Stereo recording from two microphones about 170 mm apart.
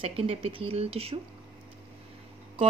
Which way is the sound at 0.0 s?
35° right (ahead or behind).